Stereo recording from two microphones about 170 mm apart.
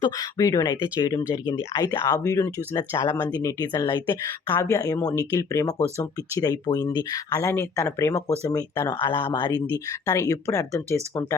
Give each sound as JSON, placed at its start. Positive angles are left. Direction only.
{"t": 0.0, "sound": "speech", "side_deg": 20}